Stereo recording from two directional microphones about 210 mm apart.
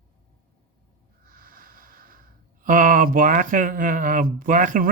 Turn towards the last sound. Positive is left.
turn(degrees=-40)  # may be behind; listen again after turning